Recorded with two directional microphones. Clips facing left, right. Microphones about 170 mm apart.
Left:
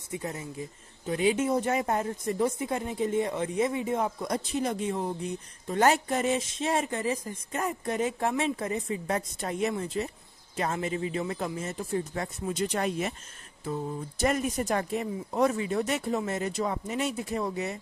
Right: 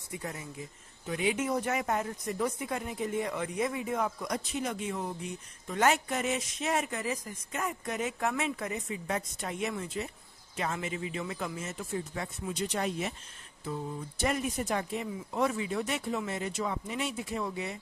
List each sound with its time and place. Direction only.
0.1 s speech: 25° left (ahead or behind); by 17.7 s 45° left (ahead or behind)